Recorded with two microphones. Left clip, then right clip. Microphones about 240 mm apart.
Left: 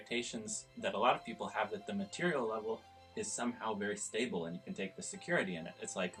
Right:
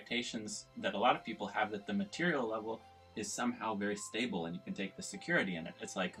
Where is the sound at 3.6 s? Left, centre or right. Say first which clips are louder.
Right 1 dB; centre.